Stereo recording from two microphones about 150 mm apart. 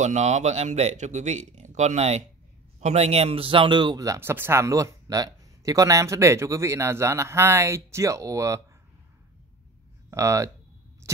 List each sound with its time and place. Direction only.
0.0 s speech: 50° right (ahead or behind); by 8.6 s 20° right (ahead or behind)
10.1 s speech: 20° right (ahead or behind)